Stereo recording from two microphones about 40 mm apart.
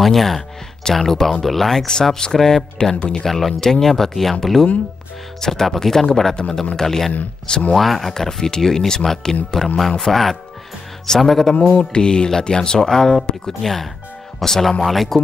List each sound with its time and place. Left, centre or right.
0.0 s speech: centre
1.9 s speech: centre
3.0 s mantra: left
3.3 s speech: centre
11.8 s mantra: left
12.3 s speech: centre